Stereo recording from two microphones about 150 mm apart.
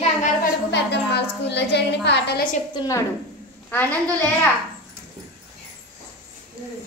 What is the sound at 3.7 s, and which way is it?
Speech, 10° left (ahead or behind).